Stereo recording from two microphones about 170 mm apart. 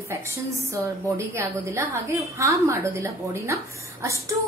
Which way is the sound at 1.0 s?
15° right (ahead or behind).